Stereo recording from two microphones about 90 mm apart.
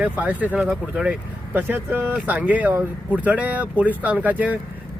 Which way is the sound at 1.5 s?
20° right (ahead or behind).